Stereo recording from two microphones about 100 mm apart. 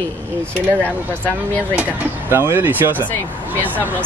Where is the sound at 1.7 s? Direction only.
15° right (ahead or behind).